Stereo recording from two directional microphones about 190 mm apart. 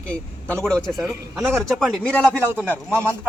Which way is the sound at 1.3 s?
10° right (ahead or behind).